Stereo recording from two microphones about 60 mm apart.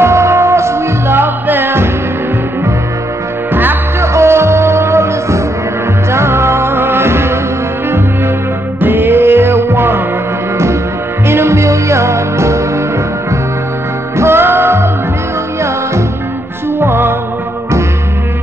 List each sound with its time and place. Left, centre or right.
0.0 s music: right
3.5 s music: right
4.1 s music: right
8.8 s music: right
11.2 s music: right
14.1 s music: right
16.8 s music: right